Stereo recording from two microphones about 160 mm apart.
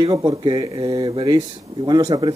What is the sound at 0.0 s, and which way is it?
Speech, 25° right (ahead or behind).